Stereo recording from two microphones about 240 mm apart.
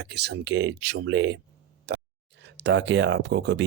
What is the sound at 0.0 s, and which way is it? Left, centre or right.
Speech, right.